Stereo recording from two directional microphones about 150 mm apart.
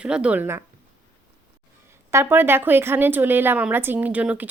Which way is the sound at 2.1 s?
15° right (ahead or behind).